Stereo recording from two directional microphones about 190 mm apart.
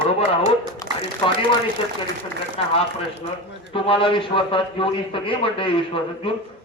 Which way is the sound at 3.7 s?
25° left (ahead or behind).